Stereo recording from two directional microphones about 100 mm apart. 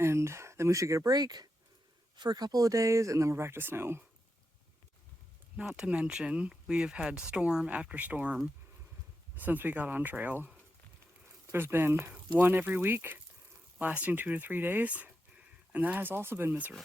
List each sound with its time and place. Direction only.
0.0 s speech: 25° right (ahead or behind)
5.6 s speech: 10° right (ahead or behind)